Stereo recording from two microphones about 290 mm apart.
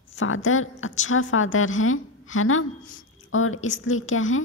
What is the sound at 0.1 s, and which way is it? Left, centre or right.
A woman's voice, left.